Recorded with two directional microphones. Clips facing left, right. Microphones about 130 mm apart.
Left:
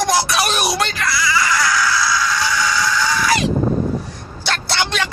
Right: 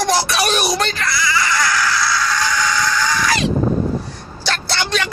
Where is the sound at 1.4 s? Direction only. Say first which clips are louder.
Left 1 dB; 5° left (ahead or behind).